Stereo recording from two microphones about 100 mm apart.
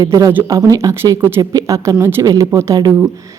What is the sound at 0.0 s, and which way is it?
A woman's voice, 35° right (ahead or behind).